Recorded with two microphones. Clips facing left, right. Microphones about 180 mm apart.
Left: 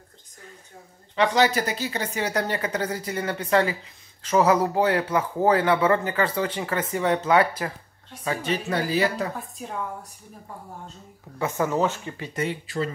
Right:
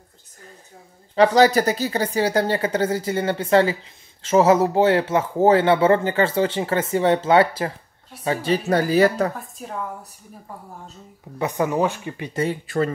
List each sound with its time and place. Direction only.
1.1 s speech: 40° right (ahead or behind)
11.3 s speech: 15° right (ahead or behind)
12.6 s speech: 55° right (ahead or behind)